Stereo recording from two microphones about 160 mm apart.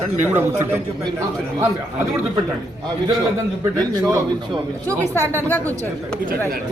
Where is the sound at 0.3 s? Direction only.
15° right (ahead or behind).